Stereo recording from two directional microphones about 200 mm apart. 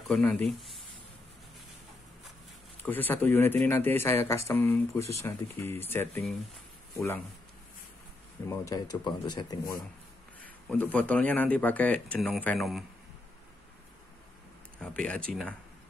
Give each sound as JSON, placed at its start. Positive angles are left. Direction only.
{"t": 0.1, "sound": "speech", "side_deg": 5}
{"t": 2.8, "sound": "a man's voice", "side_deg": 10}
{"t": 8.5, "sound": "speech", "side_deg": 20}
{"t": 10.7, "sound": "a man's voice", "side_deg": 5}
{"t": 14.8, "sound": "speech", "side_deg": 5}